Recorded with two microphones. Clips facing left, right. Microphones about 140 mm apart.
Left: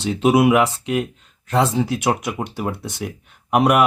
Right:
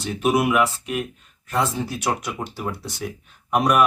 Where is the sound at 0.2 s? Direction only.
25° left (ahead or behind).